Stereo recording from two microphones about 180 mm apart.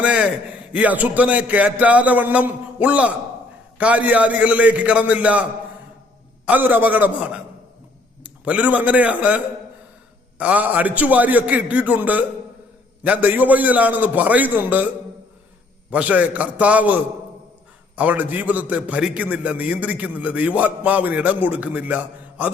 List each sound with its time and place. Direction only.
0.0 s a sound: 5° right (ahead or behind)
0.7 s a man's voice: 10° right (ahead or behind)
15.9 s a man's voice: 10° right (ahead or behind)